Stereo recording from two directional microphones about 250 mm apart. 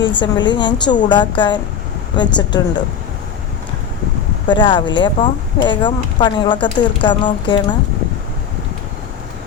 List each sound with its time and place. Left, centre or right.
0.2 s a woman's voice: centre
4.4 s speech: centre